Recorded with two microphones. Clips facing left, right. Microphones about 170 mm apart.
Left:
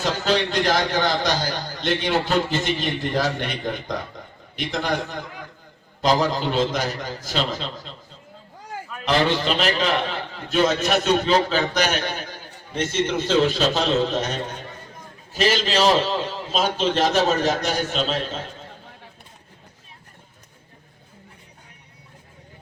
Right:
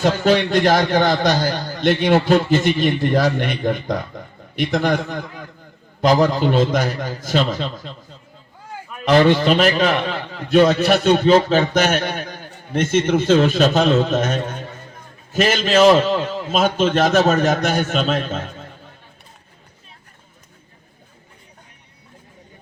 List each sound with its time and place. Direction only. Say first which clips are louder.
0.0 s a man's voice: right 6 dB; 50° right (ahead or behind)
9.0 s a man's voice: right 7 dB; 50° right (ahead or behind)